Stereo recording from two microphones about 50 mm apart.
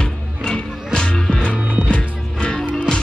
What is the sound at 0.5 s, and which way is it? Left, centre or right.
Music, left.